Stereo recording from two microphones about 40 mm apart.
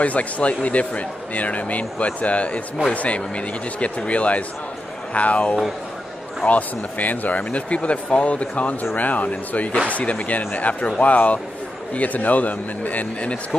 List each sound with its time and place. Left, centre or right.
0.0 s a man's voice: left